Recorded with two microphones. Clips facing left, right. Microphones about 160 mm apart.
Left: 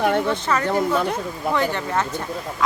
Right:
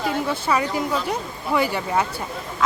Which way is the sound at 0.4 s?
10° right (ahead or behind).